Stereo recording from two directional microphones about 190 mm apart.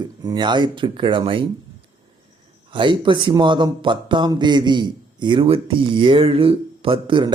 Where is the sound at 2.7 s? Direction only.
25° right (ahead or behind).